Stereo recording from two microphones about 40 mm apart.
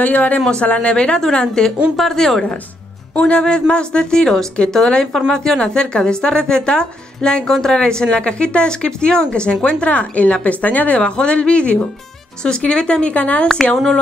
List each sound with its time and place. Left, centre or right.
0.0 s a woman's voice: left; by 2.4 s centre
3.2 s speech: left
7.4 s speech: centre
7.7 s a woman's voice: left
11.0 s speech: left
13.1 s a woman's voice: left